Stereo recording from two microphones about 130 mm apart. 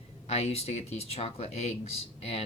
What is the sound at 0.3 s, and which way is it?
Speech, 50° left (ahead or behind).